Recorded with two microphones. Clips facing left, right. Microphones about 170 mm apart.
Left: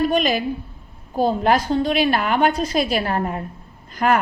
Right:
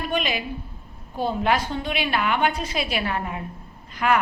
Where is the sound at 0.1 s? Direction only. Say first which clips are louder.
Left 6 dB; 40° left (ahead or behind).